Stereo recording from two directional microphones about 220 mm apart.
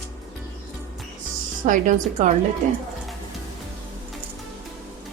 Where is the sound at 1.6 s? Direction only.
35° right (ahead or behind).